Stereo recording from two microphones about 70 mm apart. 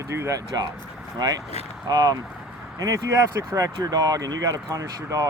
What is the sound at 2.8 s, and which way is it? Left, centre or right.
Speech, right.